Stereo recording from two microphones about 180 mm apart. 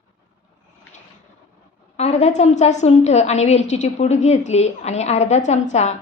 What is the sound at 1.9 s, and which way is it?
A woman's voice, 35° left (ahead or behind).